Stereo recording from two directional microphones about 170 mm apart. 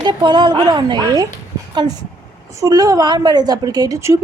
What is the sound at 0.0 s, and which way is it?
A woman's voice, 25° right (ahead or behind).